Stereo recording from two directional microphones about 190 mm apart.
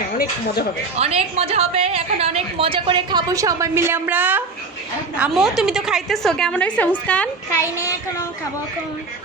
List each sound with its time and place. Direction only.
0.2 s speech: 55° left (ahead or behind)
0.9 s a woman's voice: 35° right (ahead or behind); by 7.3 s 10° left (ahead or behind)